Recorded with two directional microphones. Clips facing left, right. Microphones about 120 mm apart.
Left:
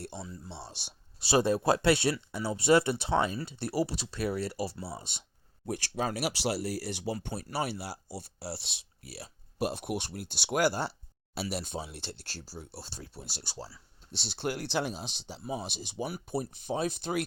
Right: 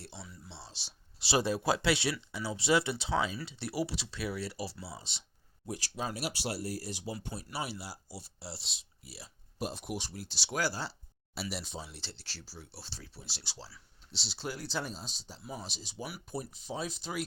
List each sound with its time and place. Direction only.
0.4 s speech: 55° left (ahead or behind)
5.6 s speech: 60° left (ahead or behind)